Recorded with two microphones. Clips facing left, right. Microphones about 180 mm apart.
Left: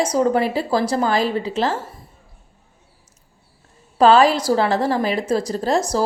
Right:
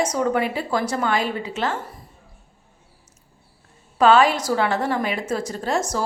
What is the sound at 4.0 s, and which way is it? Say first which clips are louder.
A woman's voice: left 3 dB; 35° left (ahead or behind).